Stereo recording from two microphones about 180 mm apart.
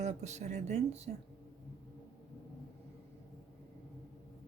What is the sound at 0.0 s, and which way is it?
Speech, 40° right (ahead or behind).